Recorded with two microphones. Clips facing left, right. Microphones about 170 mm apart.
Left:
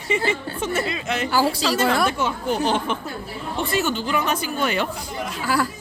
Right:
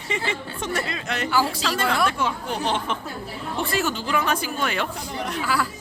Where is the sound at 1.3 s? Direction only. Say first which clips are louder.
Left 2 dB; 35° left (ahead or behind).